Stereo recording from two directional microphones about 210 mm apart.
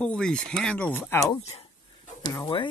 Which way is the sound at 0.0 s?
5° left (ahead or behind).